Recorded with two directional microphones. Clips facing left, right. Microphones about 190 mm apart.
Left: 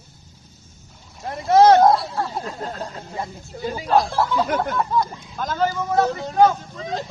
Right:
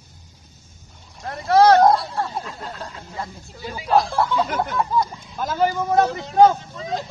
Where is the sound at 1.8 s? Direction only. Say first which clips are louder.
Even; centre (ahead or behind).